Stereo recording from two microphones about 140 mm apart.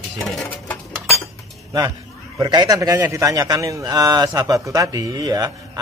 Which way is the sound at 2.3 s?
30° right (ahead or behind).